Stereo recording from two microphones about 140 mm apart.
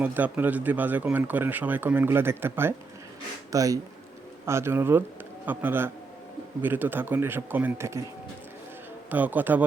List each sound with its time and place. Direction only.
0.0 s speech: 10° right (ahead or behind)
9.0 s speech: 10° right (ahead or behind)